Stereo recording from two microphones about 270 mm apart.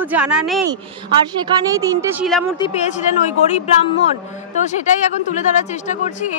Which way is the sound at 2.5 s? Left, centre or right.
Left.